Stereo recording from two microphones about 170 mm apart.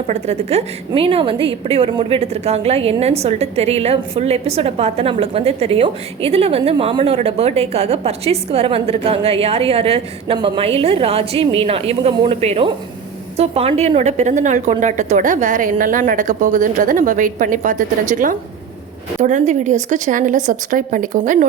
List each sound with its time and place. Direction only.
0.1 s a woman's voice: 40° right (ahead or behind)